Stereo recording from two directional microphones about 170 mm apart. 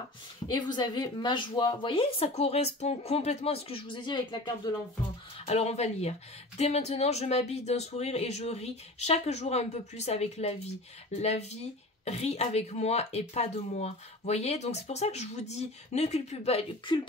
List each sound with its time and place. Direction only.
0.7 s speech: 30° left (ahead or behind)
5.4 s speech: 40° left (ahead or behind)